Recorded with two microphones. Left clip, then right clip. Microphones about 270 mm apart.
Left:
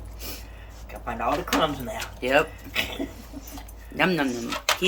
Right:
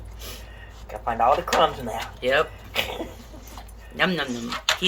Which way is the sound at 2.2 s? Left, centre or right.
Centre.